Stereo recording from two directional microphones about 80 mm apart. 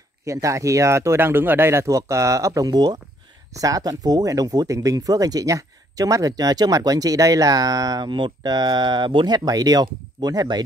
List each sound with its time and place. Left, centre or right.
0.2 s speech: right
3.5 s speech: right